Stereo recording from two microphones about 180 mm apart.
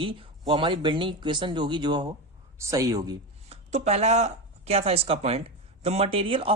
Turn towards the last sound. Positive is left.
turn(degrees=-30)  # may be behind; listen again after turning